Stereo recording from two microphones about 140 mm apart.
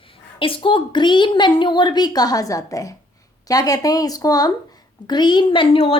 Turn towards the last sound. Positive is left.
turn(degrees=40)  # may be behind; listen again after turning